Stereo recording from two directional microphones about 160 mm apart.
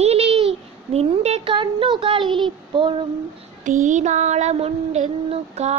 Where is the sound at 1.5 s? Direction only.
30° right (ahead or behind).